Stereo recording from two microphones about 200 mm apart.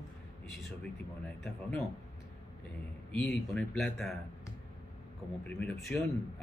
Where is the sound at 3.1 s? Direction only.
5° left (ahead or behind).